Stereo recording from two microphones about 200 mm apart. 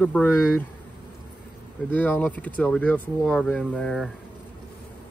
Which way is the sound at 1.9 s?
5° left (ahead or behind).